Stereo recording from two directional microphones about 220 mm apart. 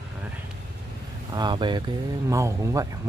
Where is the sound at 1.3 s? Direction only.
20° right (ahead or behind).